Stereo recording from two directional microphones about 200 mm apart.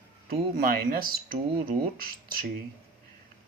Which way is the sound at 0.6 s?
45° right (ahead or behind).